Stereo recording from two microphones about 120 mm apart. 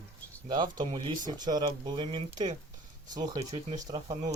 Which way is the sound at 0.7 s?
40° right (ahead or behind).